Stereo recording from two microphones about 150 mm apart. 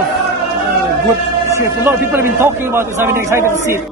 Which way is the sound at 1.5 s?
15° right (ahead or behind).